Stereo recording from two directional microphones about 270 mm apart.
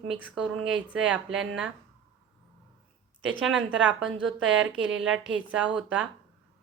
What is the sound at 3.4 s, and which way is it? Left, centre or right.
A woman's voice, centre.